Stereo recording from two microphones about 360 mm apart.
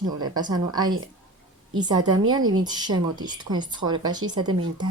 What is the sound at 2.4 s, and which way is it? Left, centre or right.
Speech, right.